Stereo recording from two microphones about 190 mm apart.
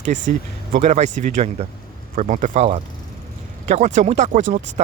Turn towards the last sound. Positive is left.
turn(degrees=-40)  # may be behind; listen again after turning